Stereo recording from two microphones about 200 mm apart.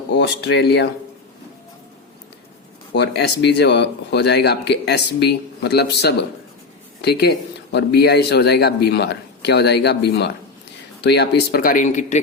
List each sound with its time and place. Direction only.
0.1 s speech: 60° left (ahead or behind)
2.9 s speech: 55° left (ahead or behind); by 12.2 s 35° left (ahead or behind)